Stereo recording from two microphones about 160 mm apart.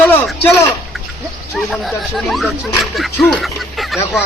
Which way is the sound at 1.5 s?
Centre (ahead or behind).